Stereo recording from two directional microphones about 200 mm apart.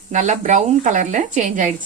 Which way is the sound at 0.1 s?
35° right (ahead or behind).